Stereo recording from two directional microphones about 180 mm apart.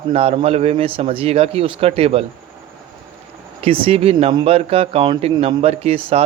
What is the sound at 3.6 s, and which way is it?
Speech, 35° right (ahead or behind).